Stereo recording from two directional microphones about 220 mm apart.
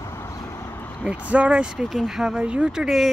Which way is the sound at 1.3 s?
5° right (ahead or behind).